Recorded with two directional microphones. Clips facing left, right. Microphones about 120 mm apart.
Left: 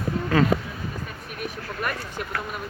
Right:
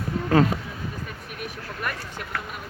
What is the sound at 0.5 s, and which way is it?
Speech, 90° left.